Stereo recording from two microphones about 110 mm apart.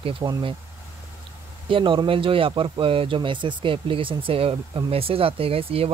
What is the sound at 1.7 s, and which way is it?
Speech, 50° right (ahead or behind).